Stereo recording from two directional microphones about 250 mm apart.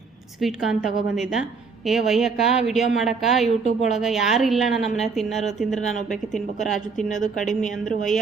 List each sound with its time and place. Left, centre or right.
0.4 s a woman's voice: centre
3.6 s a woman's voice: left
3.8 s a woman's voice: centre